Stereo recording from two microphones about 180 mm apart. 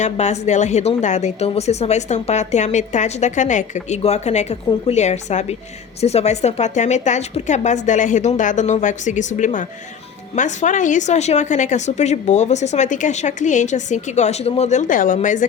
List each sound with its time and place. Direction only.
0.0 s a woman's voice: 40° left (ahead or behind)